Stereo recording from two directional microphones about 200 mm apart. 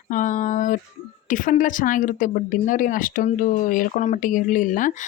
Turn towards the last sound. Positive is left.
turn(degrees=40)  # may be behind; listen again after turning